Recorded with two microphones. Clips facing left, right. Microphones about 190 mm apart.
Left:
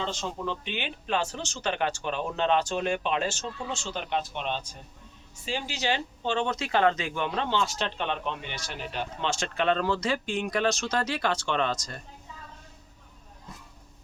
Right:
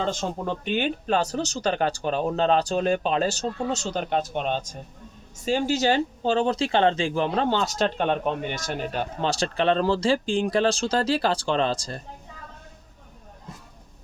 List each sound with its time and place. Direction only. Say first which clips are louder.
0.0 s speech: right 5 dB; 50° right (ahead or behind); by 12.0 s 30° right (ahead or behind)